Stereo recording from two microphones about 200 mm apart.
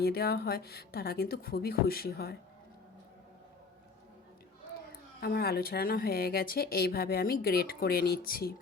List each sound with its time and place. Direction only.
0.0 s a woman's voice: 50° left (ahead or behind)
4.9 s a woman's voice: 50° left (ahead or behind)